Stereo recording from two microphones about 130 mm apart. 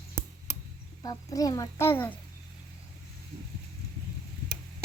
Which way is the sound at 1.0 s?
30° left (ahead or behind).